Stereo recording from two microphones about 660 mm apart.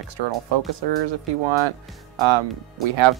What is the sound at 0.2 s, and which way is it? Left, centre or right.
Speech, right.